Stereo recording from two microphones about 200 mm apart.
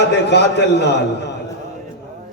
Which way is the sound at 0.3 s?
60° left (ahead or behind).